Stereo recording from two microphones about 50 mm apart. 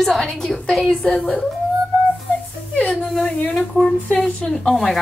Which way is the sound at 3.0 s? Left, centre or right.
Centre.